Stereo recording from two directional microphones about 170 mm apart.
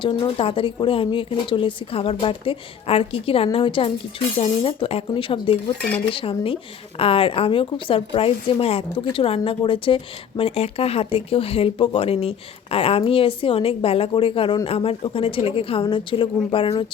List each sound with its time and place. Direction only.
0.0 s a woman's voice: 30° left (ahead or behind)